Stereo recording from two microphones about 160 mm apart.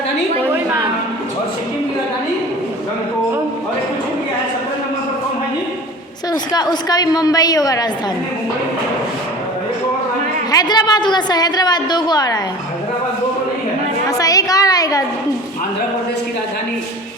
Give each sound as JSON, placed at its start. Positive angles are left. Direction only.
{"t": 6.3, "sound": "a woman's voice", "side_deg": 25}
{"t": 10.5, "sound": "a woman's voice", "side_deg": 25}
{"t": 14.1, "sound": "a sound", "side_deg": 20}